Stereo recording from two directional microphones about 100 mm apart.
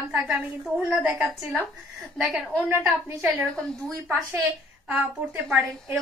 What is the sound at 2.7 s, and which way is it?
Speech, 25° right (ahead or behind).